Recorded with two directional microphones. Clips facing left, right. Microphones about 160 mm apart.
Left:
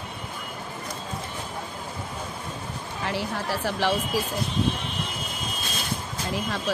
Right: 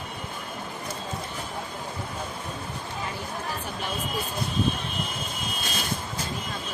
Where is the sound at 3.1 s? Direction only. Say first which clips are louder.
Left 10 dB; 85° left.